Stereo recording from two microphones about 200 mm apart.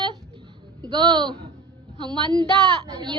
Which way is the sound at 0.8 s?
25° right (ahead or behind).